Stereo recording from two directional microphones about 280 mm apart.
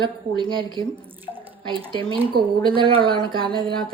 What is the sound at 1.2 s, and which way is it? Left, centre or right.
Drip, centre.